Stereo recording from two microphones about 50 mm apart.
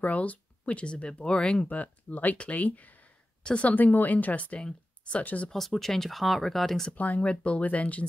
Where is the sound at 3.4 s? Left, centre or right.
Left.